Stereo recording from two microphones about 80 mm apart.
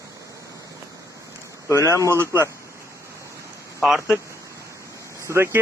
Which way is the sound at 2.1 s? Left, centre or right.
Right.